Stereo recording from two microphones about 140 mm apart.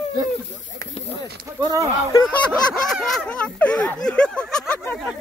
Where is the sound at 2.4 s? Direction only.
Centre (ahead or behind).